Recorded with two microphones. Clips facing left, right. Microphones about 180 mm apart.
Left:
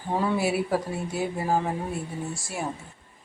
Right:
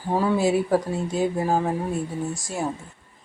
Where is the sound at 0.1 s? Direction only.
15° right (ahead or behind).